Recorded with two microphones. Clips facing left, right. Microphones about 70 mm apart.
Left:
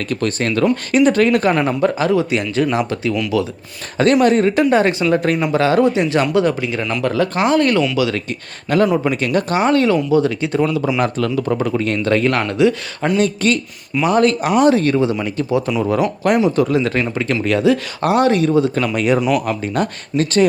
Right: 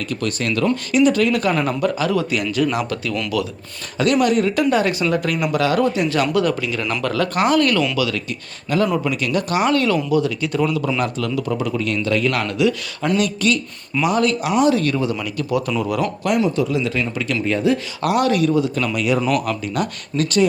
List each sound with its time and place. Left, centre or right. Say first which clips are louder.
0.1 s speech: left 4 dB; left
3.9 s speech: left 4 dB; left
8.7 s speech: left 4 dB; left; by 11.0 s centre
11.0 s speech: left 4 dB; left
16.6 s speech: left 4 dB; left
17.4 s speech: left 3 dB; left
18.0 s speech: left 3 dB; left